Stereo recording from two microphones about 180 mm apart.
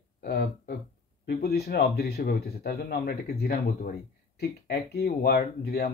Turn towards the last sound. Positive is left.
turn(degrees=60)  # may be behind; listen again after turning